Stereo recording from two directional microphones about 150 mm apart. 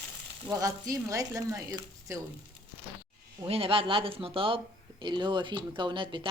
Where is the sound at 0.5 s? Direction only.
20° right (ahead or behind).